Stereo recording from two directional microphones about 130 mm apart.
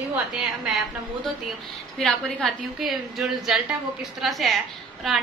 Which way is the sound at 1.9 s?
Centre (ahead or behind).